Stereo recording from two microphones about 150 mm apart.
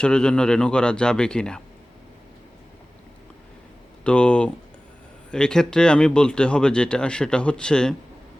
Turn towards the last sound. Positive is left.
turn(degrees=5)  # may be behind; listen again after turning